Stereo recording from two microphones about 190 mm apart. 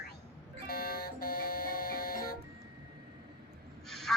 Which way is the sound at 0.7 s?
50° left (ahead or behind).